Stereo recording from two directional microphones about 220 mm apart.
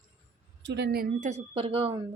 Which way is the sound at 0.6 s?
50° right (ahead or behind).